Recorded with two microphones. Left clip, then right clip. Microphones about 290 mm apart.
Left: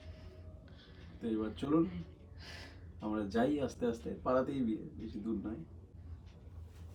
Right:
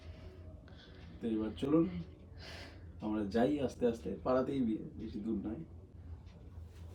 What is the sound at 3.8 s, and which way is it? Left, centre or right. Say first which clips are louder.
Speech: right 3 dB; centre.